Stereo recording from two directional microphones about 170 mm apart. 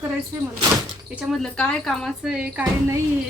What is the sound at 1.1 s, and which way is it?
Speech, centre (ahead or behind).